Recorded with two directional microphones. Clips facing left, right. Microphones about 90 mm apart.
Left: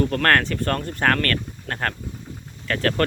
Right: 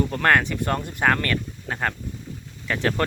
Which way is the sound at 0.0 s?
10° right (ahead or behind).